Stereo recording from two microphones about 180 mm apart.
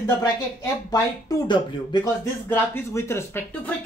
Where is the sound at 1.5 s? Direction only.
25° left (ahead or behind).